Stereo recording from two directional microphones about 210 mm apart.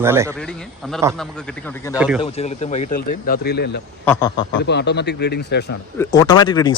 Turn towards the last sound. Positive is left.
turn(degrees=20)  # may be behind; listen again after turning